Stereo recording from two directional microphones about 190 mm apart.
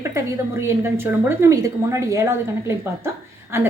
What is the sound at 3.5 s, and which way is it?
Speech, 15° right (ahead or behind).